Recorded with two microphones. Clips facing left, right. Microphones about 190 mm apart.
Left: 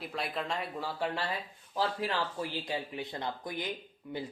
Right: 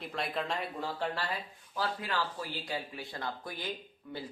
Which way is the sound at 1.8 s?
25° left (ahead or behind).